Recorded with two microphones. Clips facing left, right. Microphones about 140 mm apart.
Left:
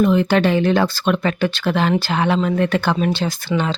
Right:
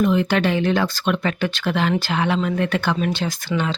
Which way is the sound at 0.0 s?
35° left (ahead or behind).